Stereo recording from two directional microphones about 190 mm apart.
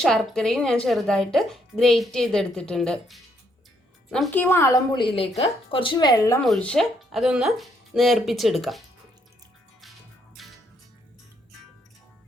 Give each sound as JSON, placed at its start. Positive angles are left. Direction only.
{"t": 0.0, "sound": "a woman's voice", "side_deg": 0}
{"t": 6.4, "sound": "a woman's voice", "side_deg": 5}
{"t": 10.4, "sound": "music", "side_deg": 0}